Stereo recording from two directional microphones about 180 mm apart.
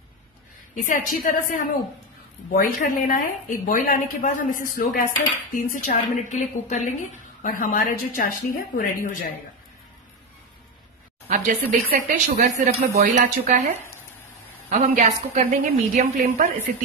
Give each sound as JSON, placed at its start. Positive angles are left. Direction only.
{"t": 0.7, "sound": "a woman's voice", "side_deg": 45}
{"t": 11.2, "sound": "speech", "side_deg": -50}
{"t": 14.7, "sound": "speech", "side_deg": -45}